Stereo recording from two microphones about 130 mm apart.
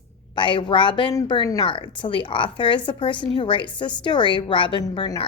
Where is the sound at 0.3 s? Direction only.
40° left (ahead or behind).